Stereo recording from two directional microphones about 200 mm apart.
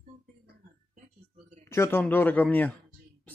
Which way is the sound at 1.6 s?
10° left (ahead or behind).